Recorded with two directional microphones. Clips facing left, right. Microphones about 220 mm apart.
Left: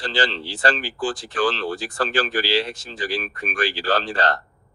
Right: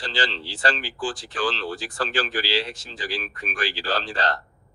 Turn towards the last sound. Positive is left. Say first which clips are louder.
# left 4 dB
turn(degrees=50)  # may be behind; listen again after turning